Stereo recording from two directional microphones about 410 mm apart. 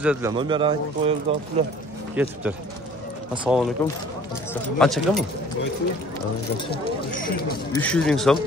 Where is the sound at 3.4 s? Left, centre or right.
Centre.